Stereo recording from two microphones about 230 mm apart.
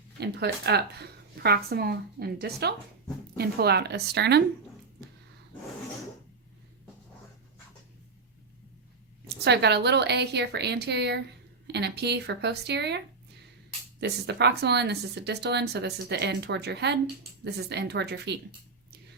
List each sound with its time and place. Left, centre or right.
0.2 s speech: right
9.4 s speech: right
14.0 s speech: right